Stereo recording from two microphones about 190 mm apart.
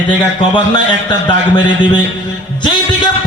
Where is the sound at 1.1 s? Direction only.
25° left (ahead or behind).